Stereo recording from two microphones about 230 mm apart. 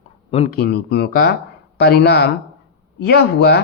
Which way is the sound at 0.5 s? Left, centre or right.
Left.